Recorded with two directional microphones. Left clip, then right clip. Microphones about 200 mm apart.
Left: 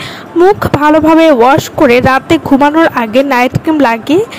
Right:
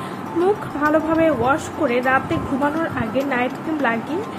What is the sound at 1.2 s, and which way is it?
Speech, 50° left (ahead or behind).